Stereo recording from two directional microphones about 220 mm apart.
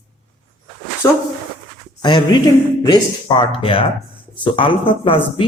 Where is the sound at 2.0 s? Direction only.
20° left (ahead or behind).